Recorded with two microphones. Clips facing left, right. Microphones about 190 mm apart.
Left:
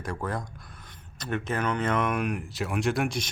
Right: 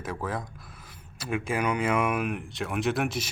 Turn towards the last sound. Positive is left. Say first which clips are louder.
# even
turn(degrees=0)  # may be behind; listen again after turning